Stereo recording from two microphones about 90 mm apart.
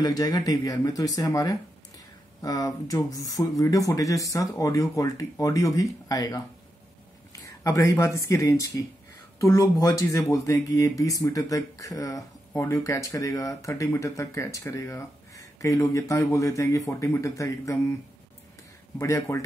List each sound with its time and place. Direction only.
0.0 s speech: 45° left (ahead or behind)
18.9 s speech: 35° left (ahead or behind)